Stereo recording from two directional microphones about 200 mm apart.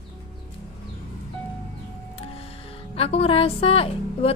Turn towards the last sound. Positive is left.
turn(degrees=30)  # may be behind; listen again after turning